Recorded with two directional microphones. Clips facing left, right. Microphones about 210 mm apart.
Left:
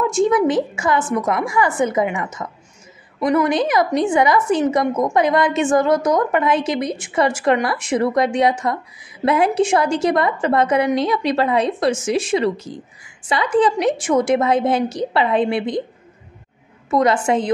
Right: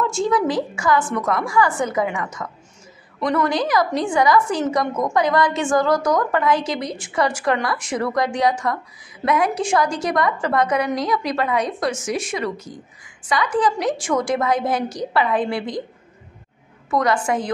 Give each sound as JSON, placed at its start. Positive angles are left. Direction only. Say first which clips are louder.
{"t": 0.0, "sound": "a woman's voice", "louder": "left 4 dB", "side_deg": 20}
{"t": 16.9, "sound": "a woman's voice", "louder": "left 4 dB", "side_deg": 25}